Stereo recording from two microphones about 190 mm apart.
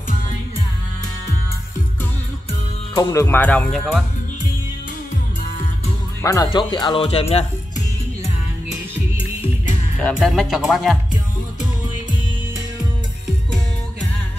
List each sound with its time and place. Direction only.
3.0 s music: 15° left (ahead or behind)
6.2 s speech: 20° left (ahead or behind)
10.0 s speech: centre (ahead or behind)